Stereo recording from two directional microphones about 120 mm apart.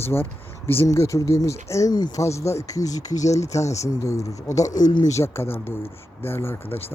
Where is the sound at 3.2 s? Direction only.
70° left (ahead or behind).